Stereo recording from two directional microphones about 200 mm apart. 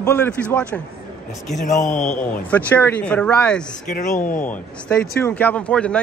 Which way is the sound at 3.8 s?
40° left (ahead or behind).